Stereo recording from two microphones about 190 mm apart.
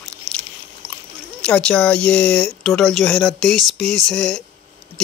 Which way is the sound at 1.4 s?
5° left (ahead or behind).